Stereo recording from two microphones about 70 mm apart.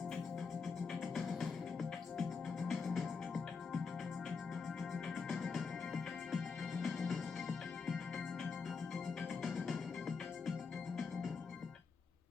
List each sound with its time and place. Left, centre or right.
1.0 s music: centre
4.9 s music: centre